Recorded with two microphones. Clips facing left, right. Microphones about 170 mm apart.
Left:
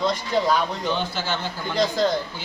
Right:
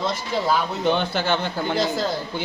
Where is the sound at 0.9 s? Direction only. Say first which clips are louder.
Right 4 dB; 60° right (ahead or behind).